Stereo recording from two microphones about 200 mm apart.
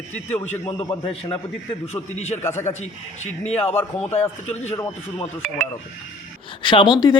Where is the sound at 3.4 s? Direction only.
30° left (ahead or behind).